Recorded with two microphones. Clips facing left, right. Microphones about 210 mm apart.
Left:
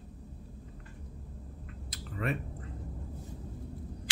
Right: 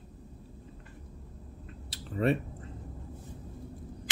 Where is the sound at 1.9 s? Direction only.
30° right (ahead or behind).